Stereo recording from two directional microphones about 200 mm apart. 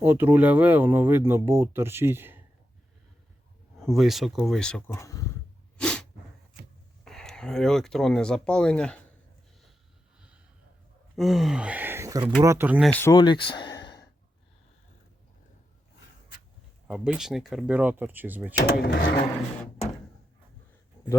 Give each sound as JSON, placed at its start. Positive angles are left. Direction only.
{"t": 0.0, "sound": "speech", "side_deg": -10}
{"t": 3.8, "sound": "speech", "side_deg": 0}
{"t": 5.7, "sound": "sneeze", "side_deg": 5}
{"t": 7.0, "sound": "speech", "side_deg": 0}
{"t": 11.2, "sound": "speech", "side_deg": 0}
{"t": 12.9, "sound": "speech", "side_deg": 10}
{"t": 13.1, "sound": "a sound", "side_deg": 25}
{"t": 16.9, "sound": "speech", "side_deg": -5}
{"t": 18.5, "sound": "speech", "side_deg": 50}